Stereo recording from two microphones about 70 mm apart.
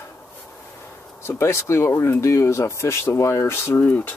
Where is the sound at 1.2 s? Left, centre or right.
Left.